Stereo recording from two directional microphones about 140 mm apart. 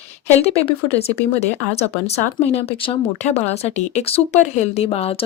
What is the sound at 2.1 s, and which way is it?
Speech, 45° left (ahead or behind).